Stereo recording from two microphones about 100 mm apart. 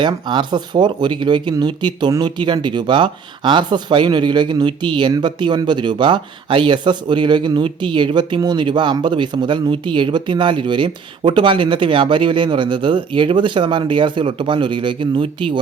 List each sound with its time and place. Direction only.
0.0 s speech: 50° right (ahead or behind)